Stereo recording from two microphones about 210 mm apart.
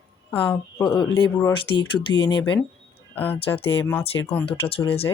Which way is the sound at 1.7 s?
25° left (ahead or behind).